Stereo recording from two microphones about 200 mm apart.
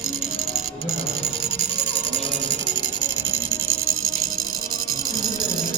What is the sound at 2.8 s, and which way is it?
Music, 70° right (ahead or behind).